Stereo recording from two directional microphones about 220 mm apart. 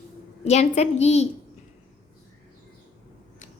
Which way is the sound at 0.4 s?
30° left (ahead or behind).